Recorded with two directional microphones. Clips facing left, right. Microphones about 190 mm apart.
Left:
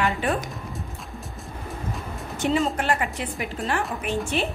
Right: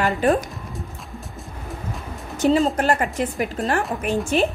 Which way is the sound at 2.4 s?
35° right (ahead or behind).